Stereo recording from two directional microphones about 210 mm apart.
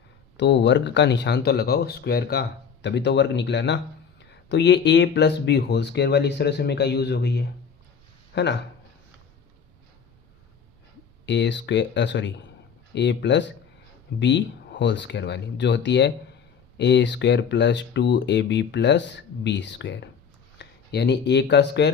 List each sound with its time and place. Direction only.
0.3 s speech: 60° left (ahead or behind)
11.3 s speech: 55° left (ahead or behind)